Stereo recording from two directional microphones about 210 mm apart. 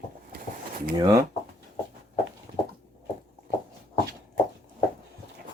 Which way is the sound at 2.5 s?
30° right (ahead or behind).